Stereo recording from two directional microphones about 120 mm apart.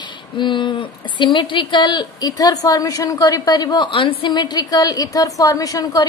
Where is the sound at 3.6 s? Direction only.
45° left (ahead or behind).